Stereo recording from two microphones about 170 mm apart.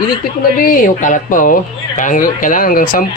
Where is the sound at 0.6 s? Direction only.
55° left (ahead or behind).